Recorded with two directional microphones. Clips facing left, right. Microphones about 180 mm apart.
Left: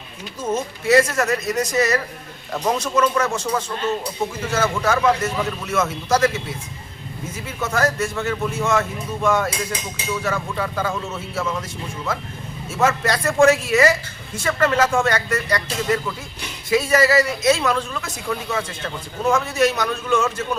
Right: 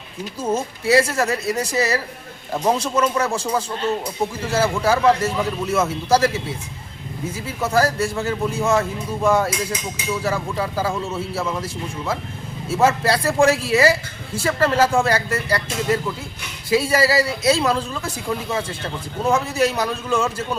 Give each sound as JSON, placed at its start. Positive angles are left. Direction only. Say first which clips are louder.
{"t": 0.5, "sound": "a man's voice", "louder": "left 1 dB", "side_deg": -30}
{"t": 7.4, "sound": "a man's voice", "louder": "right 2 dB", "side_deg": -30}
{"t": 12.6, "sound": "a man's voice", "louder": "right 2 dB", "side_deg": -30}